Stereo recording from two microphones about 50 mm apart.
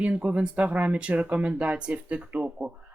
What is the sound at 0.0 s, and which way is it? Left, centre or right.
Speech, right.